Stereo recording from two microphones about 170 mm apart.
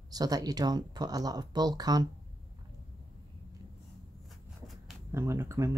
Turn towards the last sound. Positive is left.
turn(degrees=-15)  # may be behind; listen again after turning